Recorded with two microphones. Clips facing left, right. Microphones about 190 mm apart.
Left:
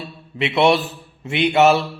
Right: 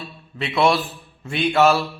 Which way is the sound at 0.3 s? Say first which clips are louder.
Left 3 dB; 25° left (ahead or behind).